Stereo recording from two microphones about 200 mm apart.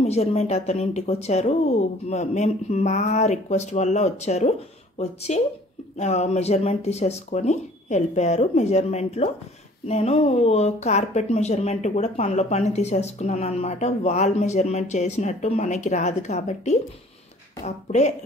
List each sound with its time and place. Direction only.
0.0 s speech: 30° left (ahead or behind)